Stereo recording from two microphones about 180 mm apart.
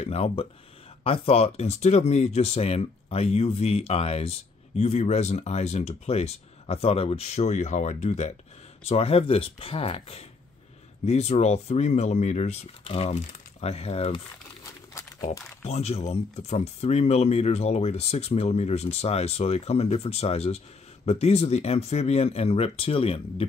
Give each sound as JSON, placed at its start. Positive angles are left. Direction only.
{"t": 0.0, "sound": "speech", "side_deg": 35}
{"t": 15.3, "sound": "speech", "side_deg": 40}